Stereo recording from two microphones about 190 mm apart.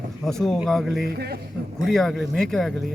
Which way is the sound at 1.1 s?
55° right (ahead or behind).